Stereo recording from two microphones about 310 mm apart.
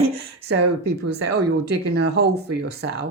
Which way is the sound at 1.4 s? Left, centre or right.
Right.